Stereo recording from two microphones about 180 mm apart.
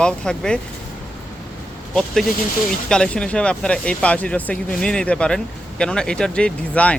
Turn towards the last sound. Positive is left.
turn(degrees=5)  # may be behind; listen again after turning